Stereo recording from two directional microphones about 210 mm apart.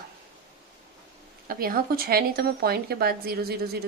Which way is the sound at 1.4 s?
45° right (ahead or behind).